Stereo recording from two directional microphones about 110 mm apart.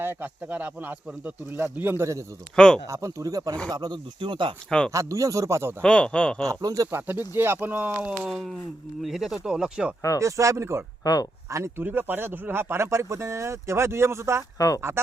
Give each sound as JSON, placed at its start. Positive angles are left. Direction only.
{"t": 0.0, "sound": "speech", "side_deg": -20}
{"t": 2.6, "sound": "speech", "side_deg": 5}
{"t": 2.8, "sound": "speech", "side_deg": -30}
{"t": 4.9, "sound": "speech", "side_deg": -30}
{"t": 5.8, "sound": "speech", "side_deg": 10}
{"t": 6.5, "sound": "speech", "side_deg": -35}
{"t": 6.9, "sound": "speech", "side_deg": -20}
{"t": 10.2, "sound": "speech", "side_deg": -30}
{"t": 11.0, "sound": "speech", "side_deg": 35}
{"t": 11.4, "sound": "speech", "side_deg": -25}